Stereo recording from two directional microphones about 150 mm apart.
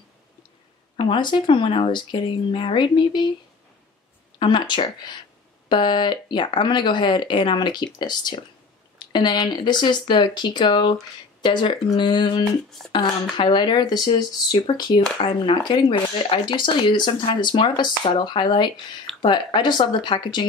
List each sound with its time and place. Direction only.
0.9 s speech: 35° left (ahead or behind)
4.4 s speech: 30° left (ahead or behind)
12.8 s speech: 5° left (ahead or behind)
13.4 s speech: 30° left (ahead or behind)